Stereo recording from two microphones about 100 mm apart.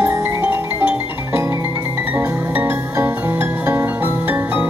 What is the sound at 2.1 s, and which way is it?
Music, 20° right (ahead or behind).